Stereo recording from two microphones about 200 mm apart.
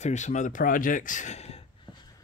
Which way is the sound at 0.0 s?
35° left (ahead or behind).